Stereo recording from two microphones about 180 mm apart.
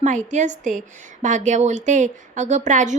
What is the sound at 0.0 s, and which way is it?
A woman's voice, 40° right (ahead or behind).